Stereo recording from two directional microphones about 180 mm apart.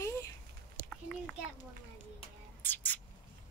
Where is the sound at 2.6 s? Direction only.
10° left (ahead or behind).